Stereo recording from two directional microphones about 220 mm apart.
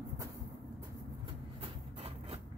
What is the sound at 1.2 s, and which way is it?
Vehicle, 25° right (ahead or behind).